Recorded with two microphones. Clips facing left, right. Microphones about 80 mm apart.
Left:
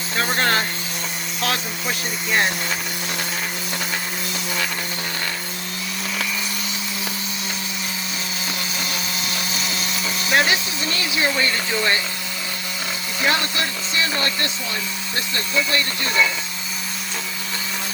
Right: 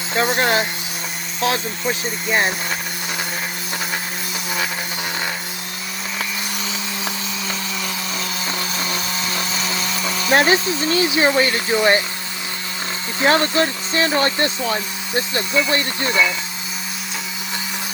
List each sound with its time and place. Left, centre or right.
0.2 s speech: centre
8.4 s power tool: right
10.3 s speech: right
13.1 s speech: right